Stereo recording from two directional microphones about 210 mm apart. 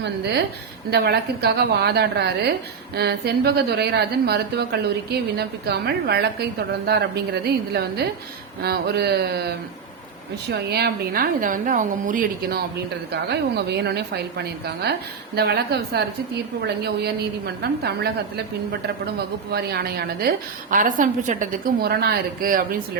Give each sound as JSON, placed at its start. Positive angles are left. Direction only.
{"t": 0.0, "sound": "a woman's voice", "side_deg": -55}